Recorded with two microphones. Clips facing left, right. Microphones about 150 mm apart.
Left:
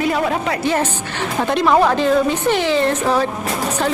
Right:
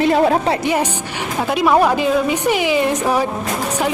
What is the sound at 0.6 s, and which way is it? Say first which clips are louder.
A woman's voice: even; 15° right (ahead or behind).